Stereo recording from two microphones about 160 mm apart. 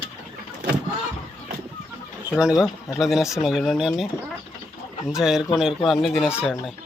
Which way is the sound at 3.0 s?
Centre (ahead or behind).